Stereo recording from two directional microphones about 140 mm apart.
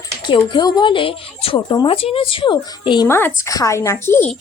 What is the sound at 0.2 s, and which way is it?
Speech, 35° left (ahead or behind).